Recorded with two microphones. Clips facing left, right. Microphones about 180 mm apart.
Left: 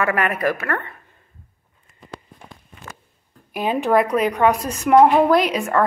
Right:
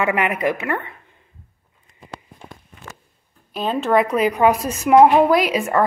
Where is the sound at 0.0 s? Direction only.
15° right (ahead or behind).